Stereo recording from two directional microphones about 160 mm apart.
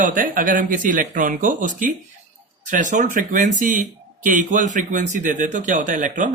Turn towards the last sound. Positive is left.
turn(degrees=-55)  # may be behind; listen again after turning